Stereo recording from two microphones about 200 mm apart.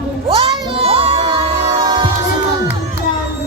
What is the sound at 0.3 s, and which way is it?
Children shouting, 25° right (ahead or behind).